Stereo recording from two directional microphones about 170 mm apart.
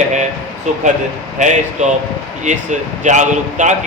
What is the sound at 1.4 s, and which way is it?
A man's voice, 45° right (ahead or behind).